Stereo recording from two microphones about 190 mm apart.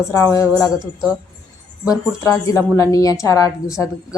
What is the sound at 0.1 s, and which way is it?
Speech, 20° left (ahead or behind).